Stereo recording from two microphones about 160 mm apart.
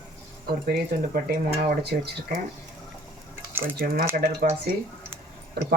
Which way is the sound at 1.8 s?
90° right.